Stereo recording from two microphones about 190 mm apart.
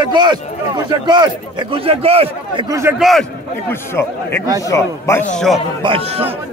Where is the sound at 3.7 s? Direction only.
10° left (ahead or behind).